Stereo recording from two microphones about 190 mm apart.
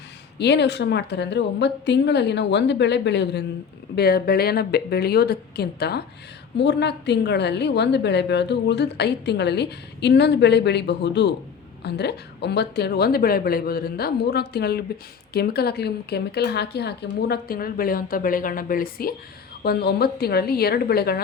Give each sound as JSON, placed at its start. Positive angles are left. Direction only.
{"t": 0.3, "sound": "a woman's voice", "side_deg": 65}
{"t": 3.9, "sound": "a woman's voice", "side_deg": 55}